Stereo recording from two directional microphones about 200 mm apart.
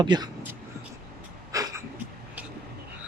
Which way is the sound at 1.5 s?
15° right (ahead or behind).